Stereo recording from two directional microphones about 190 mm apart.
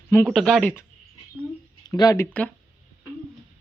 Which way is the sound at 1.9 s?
15° left (ahead or behind).